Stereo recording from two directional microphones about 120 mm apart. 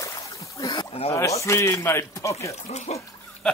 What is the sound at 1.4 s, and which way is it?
Speech, 25° left (ahead or behind).